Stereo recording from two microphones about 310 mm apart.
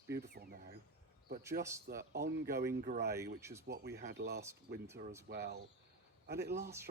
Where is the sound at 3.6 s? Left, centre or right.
Right.